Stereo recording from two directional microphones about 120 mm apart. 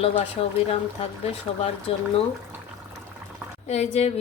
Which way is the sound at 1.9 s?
55° left (ahead or behind).